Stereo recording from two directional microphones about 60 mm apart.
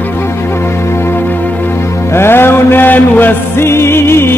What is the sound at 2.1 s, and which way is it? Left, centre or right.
Music, left.